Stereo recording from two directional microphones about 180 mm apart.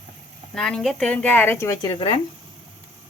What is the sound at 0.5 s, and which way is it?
Speech, 5° left (ahead or behind).